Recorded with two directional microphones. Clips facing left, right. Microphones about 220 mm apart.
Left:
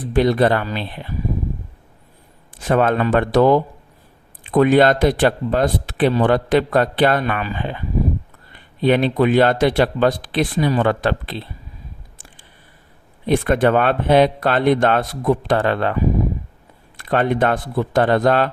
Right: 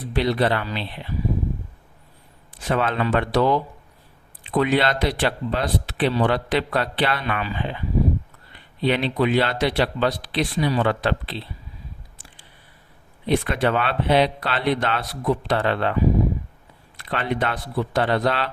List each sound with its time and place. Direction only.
0.0 s speech: 50° left (ahead or behind)
2.6 s speech: 50° left (ahead or behind)
13.2 s speech: 50° left (ahead or behind)
17.0 s speech: 50° left (ahead or behind)